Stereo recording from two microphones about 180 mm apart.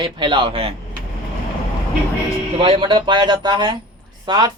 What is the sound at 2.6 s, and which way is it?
Speech, 30° right (ahead or behind).